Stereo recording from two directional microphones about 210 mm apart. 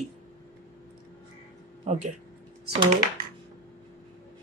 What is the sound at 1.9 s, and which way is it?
Speech, 35° right (ahead or behind).